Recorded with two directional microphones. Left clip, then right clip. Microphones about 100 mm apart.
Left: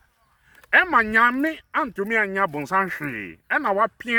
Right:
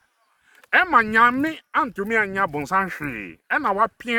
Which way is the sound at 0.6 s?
20° right (ahead or behind).